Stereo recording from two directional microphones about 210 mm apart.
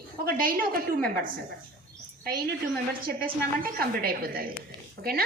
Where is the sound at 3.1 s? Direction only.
45° right (ahead or behind).